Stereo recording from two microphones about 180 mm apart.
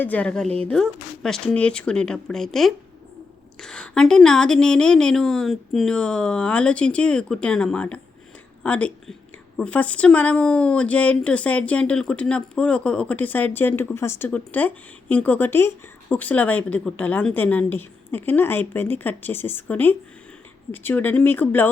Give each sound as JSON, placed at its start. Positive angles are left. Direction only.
{"t": 0.0, "sound": "a woman's voice", "side_deg": 10}
{"t": 0.4, "sound": "speech", "side_deg": -35}
{"t": 0.7, "sound": "a woman's voice", "side_deg": 5}